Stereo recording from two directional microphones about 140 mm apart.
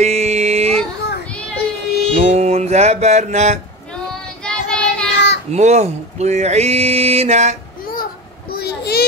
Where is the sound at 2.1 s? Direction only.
50° right (ahead or behind).